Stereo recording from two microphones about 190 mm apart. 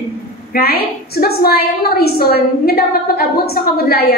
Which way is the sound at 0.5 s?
55° left (ahead or behind).